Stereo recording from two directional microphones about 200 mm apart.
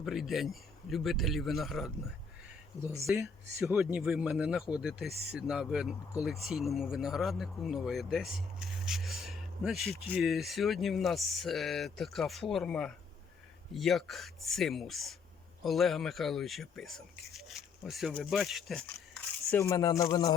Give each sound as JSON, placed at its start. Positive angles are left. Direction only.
{"t": 0.0, "sound": "speech", "side_deg": 0}
{"t": 3.1, "sound": "speech", "side_deg": -10}
{"t": 19.5, "sound": "speech", "side_deg": 15}